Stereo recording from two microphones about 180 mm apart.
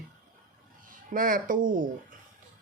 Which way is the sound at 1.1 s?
50° right (ahead or behind).